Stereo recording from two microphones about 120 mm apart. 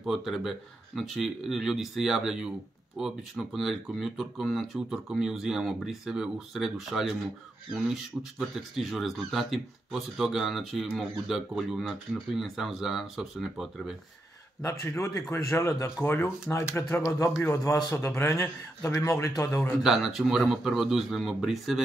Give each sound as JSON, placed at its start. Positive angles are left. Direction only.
{"t": 0.0, "sound": "speech", "side_deg": 0}
{"t": 14.6, "sound": "a man's voice", "side_deg": 25}
{"t": 19.7, "sound": "speech", "side_deg": -5}